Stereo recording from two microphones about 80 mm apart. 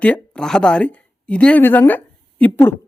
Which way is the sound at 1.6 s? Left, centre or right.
Left.